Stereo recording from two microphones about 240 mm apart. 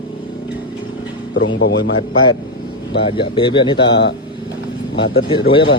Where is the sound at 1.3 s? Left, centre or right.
Left.